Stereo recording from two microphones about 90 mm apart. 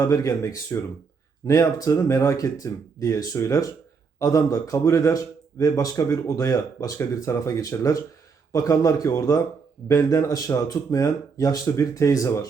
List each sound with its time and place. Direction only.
0.0 s a man's voice: 40° left (ahead or behind)